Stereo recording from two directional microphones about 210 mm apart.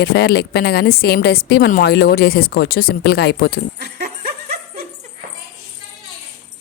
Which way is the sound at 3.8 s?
50° right (ahead or behind).